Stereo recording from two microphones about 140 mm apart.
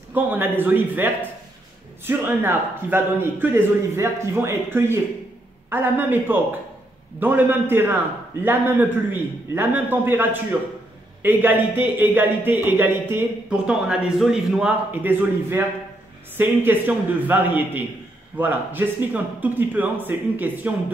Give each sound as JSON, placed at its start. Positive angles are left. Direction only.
{"t": 0.1, "sound": "speech", "side_deg": -15}